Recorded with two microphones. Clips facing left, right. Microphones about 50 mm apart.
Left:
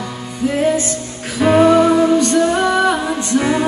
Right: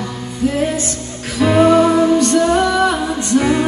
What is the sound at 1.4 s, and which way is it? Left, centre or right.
Music, centre.